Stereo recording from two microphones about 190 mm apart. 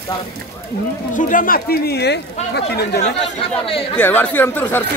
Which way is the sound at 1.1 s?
45° left (ahead or behind).